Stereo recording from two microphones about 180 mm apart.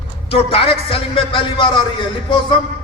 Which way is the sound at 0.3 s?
30° left (ahead or behind).